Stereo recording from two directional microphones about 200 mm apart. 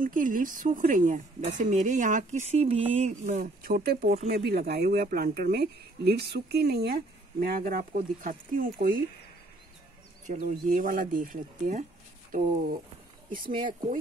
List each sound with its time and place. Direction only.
0.0 s a woman's voice: 40° right (ahead or behind)
10.2 s speech: 40° right (ahead or behind)